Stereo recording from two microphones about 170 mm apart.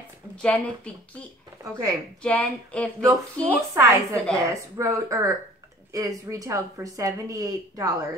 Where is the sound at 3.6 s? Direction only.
15° right (ahead or behind).